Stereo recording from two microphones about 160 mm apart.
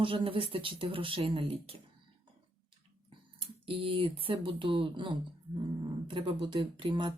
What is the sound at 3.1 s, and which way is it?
Speech, 35° right (ahead or behind).